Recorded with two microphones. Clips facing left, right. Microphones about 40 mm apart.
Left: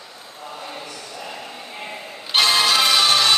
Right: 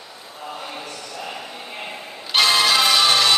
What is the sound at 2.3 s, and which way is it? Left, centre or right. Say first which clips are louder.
Music: even; centre.